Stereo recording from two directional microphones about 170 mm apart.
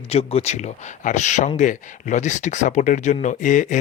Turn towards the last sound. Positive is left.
turn(degrees=50)  # may be behind; listen again after turning